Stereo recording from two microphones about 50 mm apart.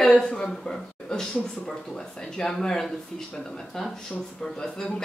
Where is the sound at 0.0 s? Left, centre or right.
Centre.